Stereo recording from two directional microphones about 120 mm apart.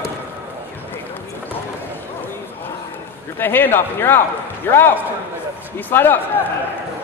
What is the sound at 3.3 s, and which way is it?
A man's voice, 15° left (ahead or behind).